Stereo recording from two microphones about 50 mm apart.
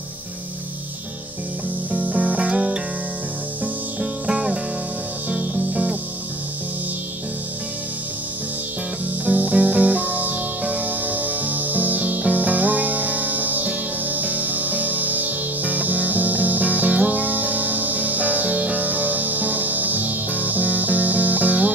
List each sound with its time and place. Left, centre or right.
1.9 s music: right
5.7 s music: centre
9.2 s music: right